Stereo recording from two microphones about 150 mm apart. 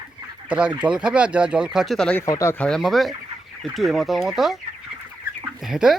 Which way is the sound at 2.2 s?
20° left (ahead or behind).